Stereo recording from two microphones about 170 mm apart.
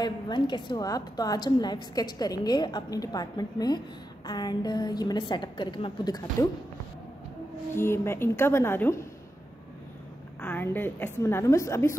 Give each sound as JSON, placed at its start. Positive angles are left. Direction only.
{"t": 0.0, "sound": "a woman's voice", "side_deg": 25}
{"t": 7.7, "sound": "a woman's voice", "side_deg": 15}
{"t": 10.4, "sound": "a woman's voice", "side_deg": 10}